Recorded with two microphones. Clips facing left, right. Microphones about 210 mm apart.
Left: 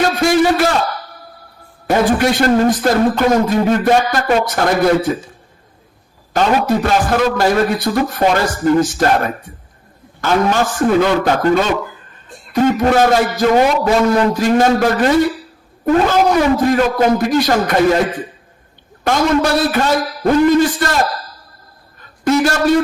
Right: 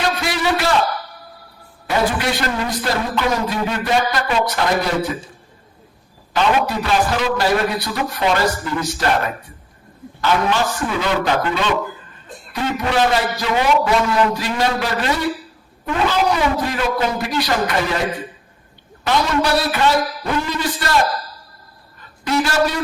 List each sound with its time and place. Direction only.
0.0 s a sound: 45° left (ahead or behind)
1.9 s speech: 45° left (ahead or behind)
6.3 s speech: 45° left (ahead or behind)
22.2 s speech: 45° left (ahead or behind)